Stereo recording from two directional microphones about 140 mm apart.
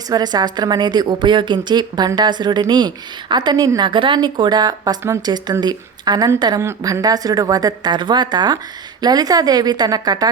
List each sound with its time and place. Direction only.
0.1 s a woman's voice: 30° right (ahead or behind)